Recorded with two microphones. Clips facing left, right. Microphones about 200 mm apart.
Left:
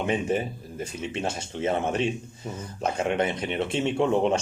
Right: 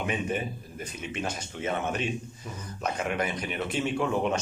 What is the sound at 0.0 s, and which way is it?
Speech, 30° left (ahead or behind).